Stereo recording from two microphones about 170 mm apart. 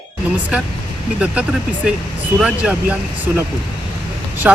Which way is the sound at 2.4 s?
5° right (ahead or behind).